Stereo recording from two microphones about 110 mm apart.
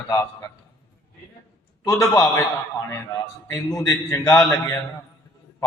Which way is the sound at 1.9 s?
35° left (ahead or behind).